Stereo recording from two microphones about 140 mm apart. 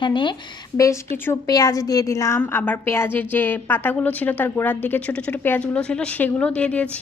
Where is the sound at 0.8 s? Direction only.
20° left (ahead or behind).